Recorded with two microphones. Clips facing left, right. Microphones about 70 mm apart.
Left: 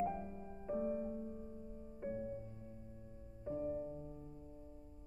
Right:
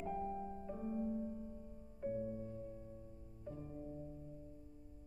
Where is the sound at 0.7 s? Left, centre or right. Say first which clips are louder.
Left 5 dB; left.